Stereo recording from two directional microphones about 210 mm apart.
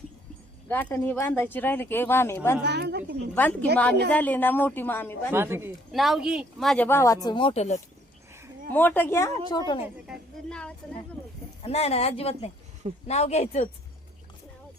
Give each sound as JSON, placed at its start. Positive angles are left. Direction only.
{"t": 0.7, "sound": "speech", "side_deg": 5}
{"t": 2.6, "sound": "a woman's voice", "side_deg": -55}
{"t": 3.3, "sound": "speech", "side_deg": 10}
{"t": 5.3, "sound": "speech", "side_deg": -10}
{"t": 8.7, "sound": "speech", "side_deg": 10}
{"t": 10.5, "sound": "a woman's voice", "side_deg": 5}
{"t": 11.6, "sound": "speech", "side_deg": 30}